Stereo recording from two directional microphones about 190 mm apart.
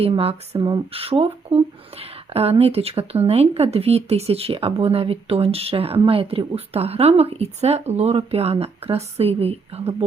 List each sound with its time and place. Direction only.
0.0 s speech: 30° right (ahead or behind)